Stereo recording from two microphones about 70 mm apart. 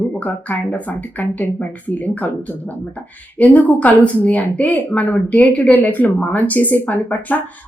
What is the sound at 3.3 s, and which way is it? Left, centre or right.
Speech, left.